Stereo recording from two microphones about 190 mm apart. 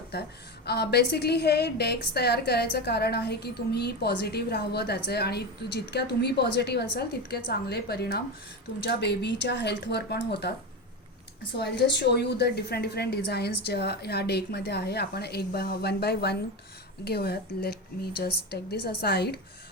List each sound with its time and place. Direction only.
0.1 s a woman's voice: 60° left (ahead or behind)
11.5 s a woman's voice: 60° left (ahead or behind)